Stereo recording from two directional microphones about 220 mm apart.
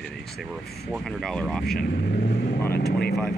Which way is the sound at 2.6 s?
45° left (ahead or behind).